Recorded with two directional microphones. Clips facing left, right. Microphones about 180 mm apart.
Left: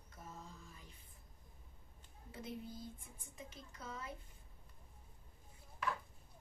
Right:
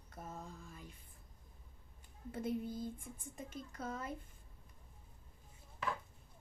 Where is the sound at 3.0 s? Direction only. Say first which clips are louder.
Right 6 dB; 50° right (ahead or behind).